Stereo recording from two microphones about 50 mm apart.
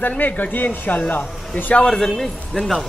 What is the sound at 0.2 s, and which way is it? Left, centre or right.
Speech, left.